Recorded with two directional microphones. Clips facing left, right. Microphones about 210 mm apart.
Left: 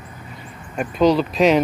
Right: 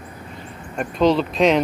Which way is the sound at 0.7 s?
5° left (ahead or behind).